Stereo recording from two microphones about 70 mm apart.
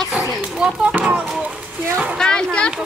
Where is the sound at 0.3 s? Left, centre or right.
Centre.